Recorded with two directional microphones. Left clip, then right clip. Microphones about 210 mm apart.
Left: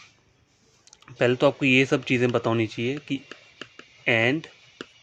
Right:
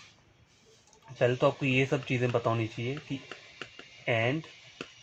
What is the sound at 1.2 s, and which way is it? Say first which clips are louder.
Speech: left 5 dB; 50° left (ahead or behind).